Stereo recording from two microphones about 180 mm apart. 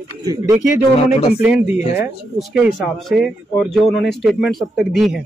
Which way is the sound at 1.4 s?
5° right (ahead or behind).